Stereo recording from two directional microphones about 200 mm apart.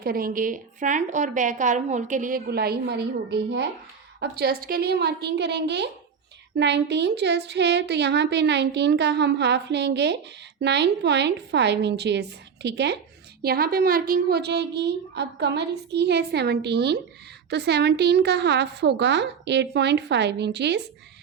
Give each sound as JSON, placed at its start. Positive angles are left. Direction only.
{"t": 0.0, "sound": "a woman's voice", "side_deg": -45}